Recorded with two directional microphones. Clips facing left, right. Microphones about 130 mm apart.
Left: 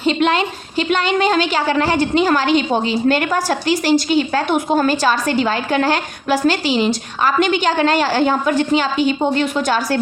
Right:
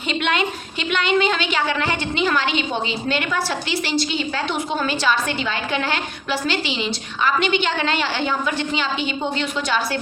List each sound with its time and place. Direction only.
0.0 s a woman's voice: 35° left (ahead or behind)